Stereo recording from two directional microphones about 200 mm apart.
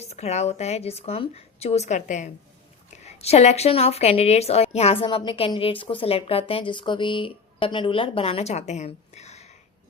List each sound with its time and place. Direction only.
0.0 s a woman's voice: 35° left (ahead or behind)